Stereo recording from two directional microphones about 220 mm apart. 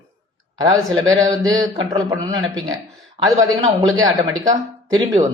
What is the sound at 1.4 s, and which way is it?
Speech, 15° right (ahead or behind).